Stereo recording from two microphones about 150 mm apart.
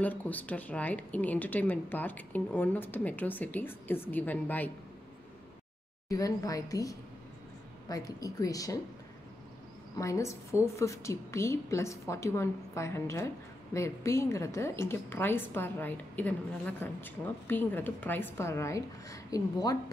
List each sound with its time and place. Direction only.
0.0 s a woman's voice: 10° left (ahead or behind)
6.0 s a woman's voice: 25° left (ahead or behind)
9.9 s a woman's voice: 20° left (ahead or behind)